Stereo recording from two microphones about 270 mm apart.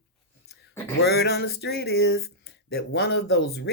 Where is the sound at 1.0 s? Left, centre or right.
Left.